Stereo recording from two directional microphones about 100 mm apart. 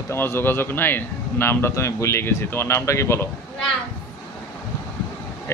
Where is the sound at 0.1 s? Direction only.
25° left (ahead or behind).